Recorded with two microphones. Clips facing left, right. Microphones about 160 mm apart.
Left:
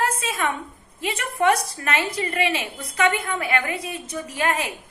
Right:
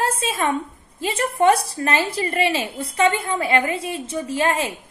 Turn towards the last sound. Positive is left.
turn(degrees=-30)  # may be behind; listen again after turning